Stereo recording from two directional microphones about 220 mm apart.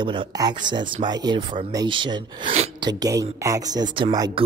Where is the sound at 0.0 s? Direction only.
20° right (ahead or behind).